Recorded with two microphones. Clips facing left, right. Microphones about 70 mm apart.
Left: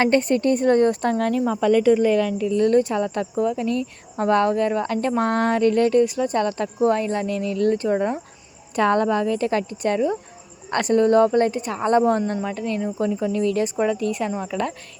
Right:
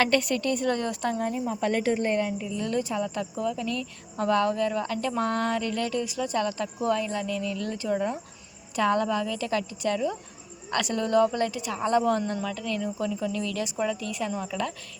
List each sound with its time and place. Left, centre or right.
0.0 s speech: left
1.2 s speech: left
2.1 s a woman's voice: left
2.6 s speech: left
3.3 s speech: left